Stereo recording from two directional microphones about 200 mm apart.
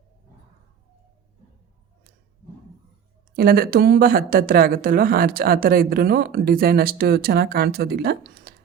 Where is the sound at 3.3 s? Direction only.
50° right (ahead or behind).